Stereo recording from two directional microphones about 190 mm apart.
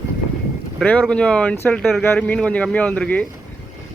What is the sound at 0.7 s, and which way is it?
Speech, 5° left (ahead or behind).